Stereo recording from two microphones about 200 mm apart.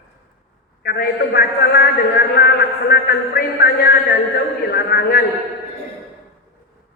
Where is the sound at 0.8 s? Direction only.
50° left (ahead or behind).